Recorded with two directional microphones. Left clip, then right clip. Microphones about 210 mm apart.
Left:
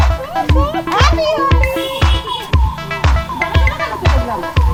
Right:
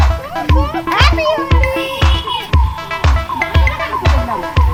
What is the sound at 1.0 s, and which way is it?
Music, 15° right (ahead or behind).